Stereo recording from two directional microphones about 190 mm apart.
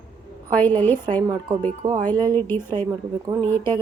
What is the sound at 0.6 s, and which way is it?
Speech, 10° left (ahead or behind).